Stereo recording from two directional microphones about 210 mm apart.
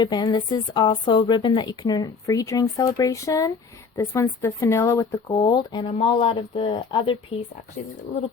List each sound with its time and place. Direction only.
0.0 s speech: 20° left (ahead or behind)
7.8 s speech: 40° left (ahead or behind)